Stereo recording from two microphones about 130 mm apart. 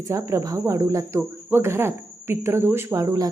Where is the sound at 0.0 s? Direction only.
25° right (ahead or behind).